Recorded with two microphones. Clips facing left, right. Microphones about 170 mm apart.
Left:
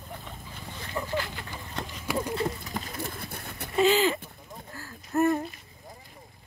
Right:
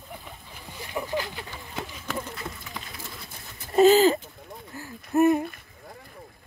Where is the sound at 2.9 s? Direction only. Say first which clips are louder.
Left 6 dB; 60° left (ahead or behind).